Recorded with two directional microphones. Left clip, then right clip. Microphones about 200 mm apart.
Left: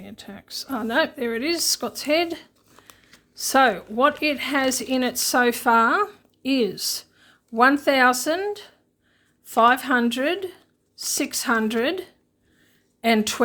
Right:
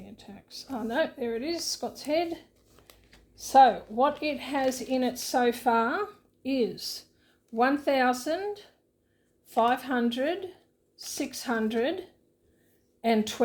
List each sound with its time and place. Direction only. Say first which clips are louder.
0.0 s a woman's voice: left 8 dB; 35° left (ahead or behind)